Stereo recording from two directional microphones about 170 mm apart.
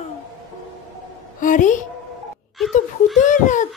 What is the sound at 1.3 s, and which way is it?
Speech, 50° left (ahead or behind).